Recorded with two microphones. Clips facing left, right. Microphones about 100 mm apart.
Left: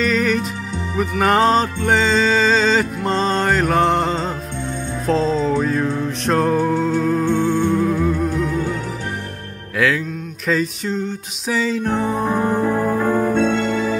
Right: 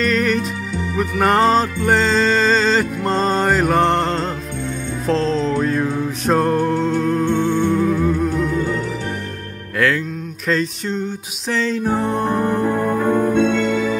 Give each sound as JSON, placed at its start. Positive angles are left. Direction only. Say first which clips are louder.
{"t": 0.0, "sound": "music", "louder": "even", "side_deg": 0}
{"t": 7.8, "sound": "music", "louder": "right 1 dB", "side_deg": 0}
{"t": 9.8, "sound": "a sound", "louder": "even", "side_deg": 0}
{"t": 13.1, "sound": "music", "louder": "right 3 dB", "side_deg": 35}